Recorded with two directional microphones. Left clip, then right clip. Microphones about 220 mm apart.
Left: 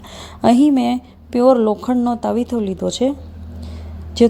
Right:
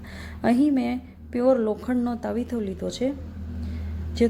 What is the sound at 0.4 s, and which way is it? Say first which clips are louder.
A woman's voice: left 9 dB; 30° left (ahead or behind).